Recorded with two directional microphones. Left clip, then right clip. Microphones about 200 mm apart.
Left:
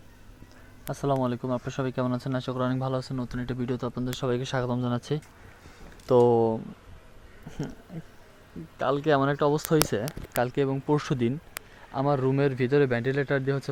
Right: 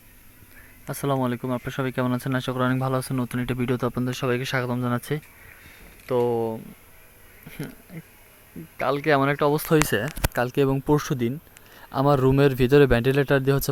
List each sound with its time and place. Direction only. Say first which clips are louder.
1.0 s speech: right 2 dB; 5° right (ahead or behind)
6.2 s speech: left 2 dB; 20° left (ahead or behind)
8.8 s speech: right 3 dB; centre (ahead or behind)
10.5 s speech: right 5 dB; 30° right (ahead or behind)
10.9 s speech: right 3 dB; 15° right (ahead or behind)
11.9 s speech: right 6 dB; 30° right (ahead or behind)